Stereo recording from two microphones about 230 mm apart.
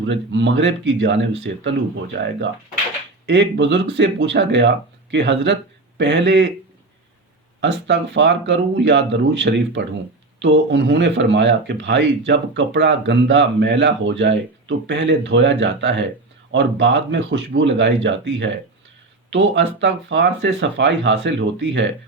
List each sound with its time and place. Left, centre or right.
0.0 s speech: right
7.6 s speech: right